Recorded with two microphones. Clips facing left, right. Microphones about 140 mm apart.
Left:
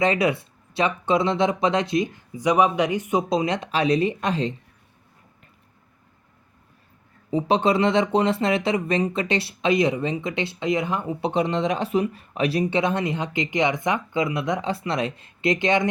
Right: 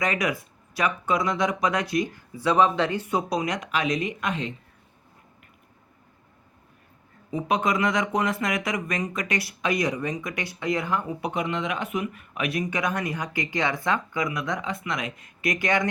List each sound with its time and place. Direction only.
0.0 s speech: 30° left (ahead or behind)
7.3 s speech: 30° left (ahead or behind)